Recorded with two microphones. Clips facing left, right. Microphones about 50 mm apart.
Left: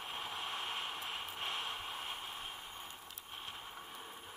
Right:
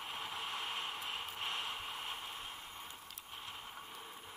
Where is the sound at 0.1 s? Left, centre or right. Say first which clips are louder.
Left 1 dB; centre.